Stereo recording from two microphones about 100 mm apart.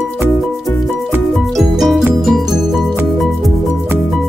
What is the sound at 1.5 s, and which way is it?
Music, centre (ahead or behind).